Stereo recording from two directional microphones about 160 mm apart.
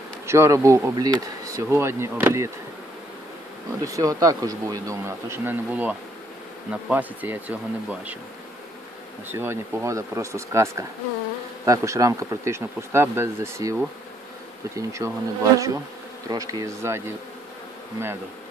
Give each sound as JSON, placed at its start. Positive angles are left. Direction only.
{"t": 0.3, "sound": "speech", "side_deg": -20}
{"t": 3.8, "sound": "speech", "side_deg": -20}
{"t": 9.3, "sound": "speech", "side_deg": -15}
{"t": 14.8, "sound": "speech", "side_deg": -20}